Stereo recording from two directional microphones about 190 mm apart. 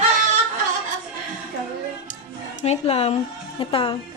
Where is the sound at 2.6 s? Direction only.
35° left (ahead or behind).